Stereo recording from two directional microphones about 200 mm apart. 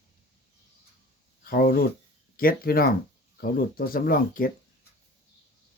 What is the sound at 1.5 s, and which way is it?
Speech, 50° left (ahead or behind).